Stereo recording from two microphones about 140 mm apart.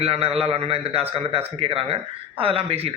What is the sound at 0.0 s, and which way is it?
A man's voice, 45° right (ahead or behind).